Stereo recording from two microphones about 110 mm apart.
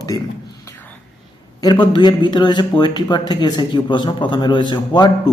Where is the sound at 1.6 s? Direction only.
40° left (ahead or behind).